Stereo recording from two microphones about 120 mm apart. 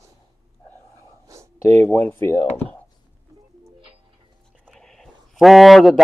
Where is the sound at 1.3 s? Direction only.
30° right (ahead or behind).